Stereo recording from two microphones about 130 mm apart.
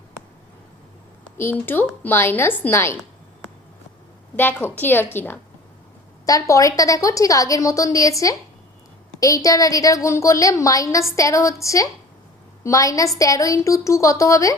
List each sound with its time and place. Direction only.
1.4 s a woman's voice: 15° left (ahead or behind)
4.4 s a woman's voice: 15° left (ahead or behind)
6.5 s a woman's voice: 25° left (ahead or behind)